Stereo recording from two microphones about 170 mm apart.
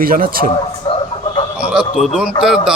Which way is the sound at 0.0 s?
60° right (ahead or behind).